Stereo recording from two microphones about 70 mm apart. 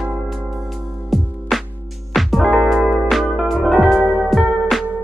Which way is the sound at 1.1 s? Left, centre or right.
Centre.